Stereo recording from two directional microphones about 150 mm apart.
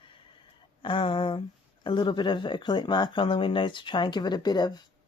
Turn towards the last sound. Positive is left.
turn(degrees=25)  # may be behind; listen again after turning